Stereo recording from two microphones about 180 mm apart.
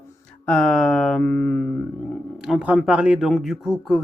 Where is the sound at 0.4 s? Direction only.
5° left (ahead or behind).